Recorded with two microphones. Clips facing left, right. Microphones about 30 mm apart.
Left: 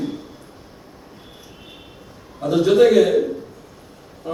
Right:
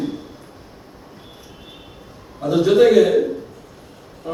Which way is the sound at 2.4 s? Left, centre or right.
Centre.